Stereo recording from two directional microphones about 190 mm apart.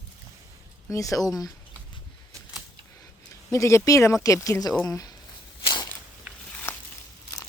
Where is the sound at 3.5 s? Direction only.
15° left (ahead or behind).